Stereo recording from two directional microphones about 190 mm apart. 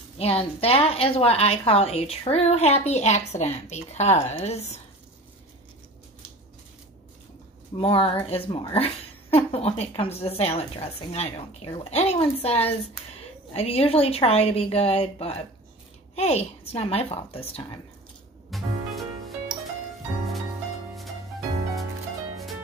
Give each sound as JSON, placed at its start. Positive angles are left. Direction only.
{"t": 0.2, "sound": "speech", "side_deg": 30}
{"t": 7.7, "sound": "speech", "side_deg": 30}
{"t": 18.5, "sound": "music", "side_deg": 0}